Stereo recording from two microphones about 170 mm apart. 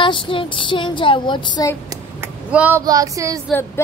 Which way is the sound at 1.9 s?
10° right (ahead or behind).